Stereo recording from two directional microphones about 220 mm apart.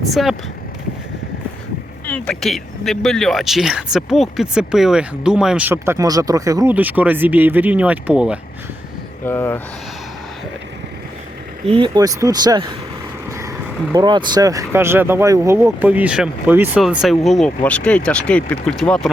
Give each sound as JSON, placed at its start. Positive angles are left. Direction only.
{"t": 0.0, "sound": "speech", "side_deg": 0}
{"t": 2.0, "sound": "speech", "side_deg": 5}
{"t": 9.2, "sound": "speech", "side_deg": 10}
{"t": 11.6, "sound": "speech", "side_deg": -25}
{"t": 13.9, "sound": "speech", "side_deg": -20}